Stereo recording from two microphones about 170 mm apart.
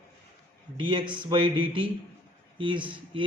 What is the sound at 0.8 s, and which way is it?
Speech, 30° right (ahead or behind).